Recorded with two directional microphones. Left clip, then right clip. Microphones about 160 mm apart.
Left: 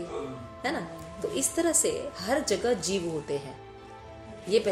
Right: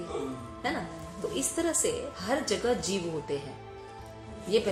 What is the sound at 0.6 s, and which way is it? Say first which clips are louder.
A woman's voice: left 1 dB; 50° left (ahead or behind).